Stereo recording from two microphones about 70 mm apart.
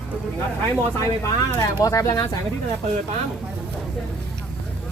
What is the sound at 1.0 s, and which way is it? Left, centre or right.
Speech, left.